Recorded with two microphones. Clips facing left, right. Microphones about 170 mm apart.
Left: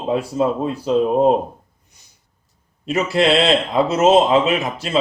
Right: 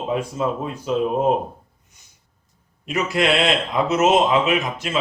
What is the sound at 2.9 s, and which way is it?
Speech, 30° left (ahead or behind).